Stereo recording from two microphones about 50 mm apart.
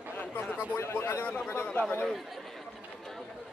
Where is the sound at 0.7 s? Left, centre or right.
Left.